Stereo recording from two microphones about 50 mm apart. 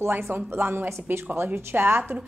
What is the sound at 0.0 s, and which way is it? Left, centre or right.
A woman's voice, right.